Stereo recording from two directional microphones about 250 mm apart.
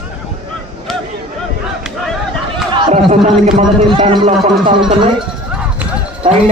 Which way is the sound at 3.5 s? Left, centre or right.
Right.